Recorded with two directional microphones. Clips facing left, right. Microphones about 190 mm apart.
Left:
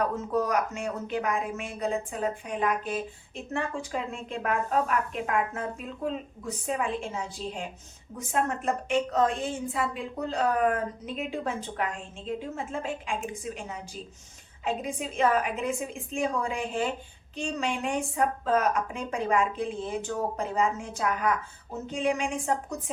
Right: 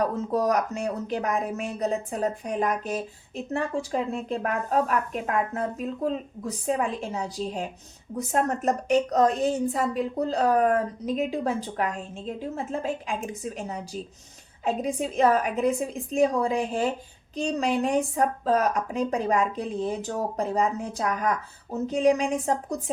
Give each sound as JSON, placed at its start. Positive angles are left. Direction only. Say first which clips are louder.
{"t": 0.0, "sound": "speech", "louder": "right 3 dB", "side_deg": -35}